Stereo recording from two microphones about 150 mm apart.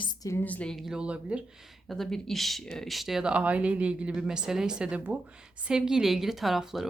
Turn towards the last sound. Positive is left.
turn(degrees=0)  # may be behind; listen again after turning